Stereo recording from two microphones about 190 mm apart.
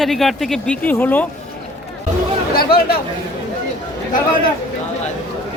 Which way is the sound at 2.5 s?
55° left (ahead or behind).